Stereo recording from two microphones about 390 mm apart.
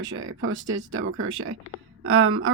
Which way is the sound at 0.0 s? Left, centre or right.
Right.